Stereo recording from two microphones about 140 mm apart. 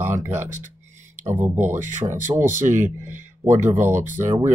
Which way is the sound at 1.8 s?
60° right (ahead or behind).